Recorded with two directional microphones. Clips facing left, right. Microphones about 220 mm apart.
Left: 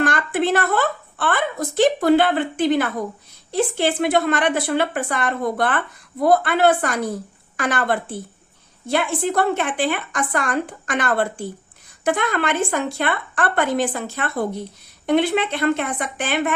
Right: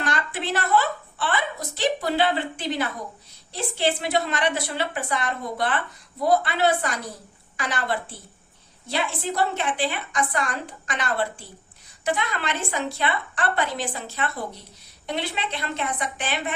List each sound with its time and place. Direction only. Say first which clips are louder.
0.0 s a woman's voice: left 8 dB; 50° left (ahead or behind)